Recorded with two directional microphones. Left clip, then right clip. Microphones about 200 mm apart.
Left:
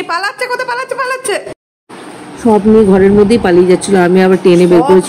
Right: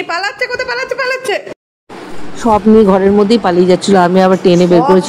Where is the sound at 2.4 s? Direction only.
20° right (ahead or behind).